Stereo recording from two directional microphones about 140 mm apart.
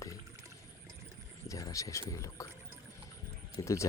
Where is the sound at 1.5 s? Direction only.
25° left (ahead or behind).